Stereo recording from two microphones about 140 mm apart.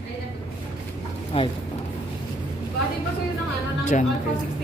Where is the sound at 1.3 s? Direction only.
40° left (ahead or behind).